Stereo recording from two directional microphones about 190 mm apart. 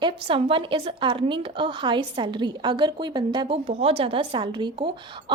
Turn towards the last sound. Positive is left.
turn(degrees=-25)  # may be behind; listen again after turning